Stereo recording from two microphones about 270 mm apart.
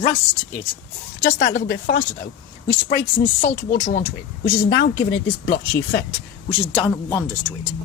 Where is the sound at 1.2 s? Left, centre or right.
Left.